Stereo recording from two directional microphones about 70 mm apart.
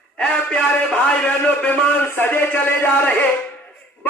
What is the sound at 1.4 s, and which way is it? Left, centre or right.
A man's voice, left.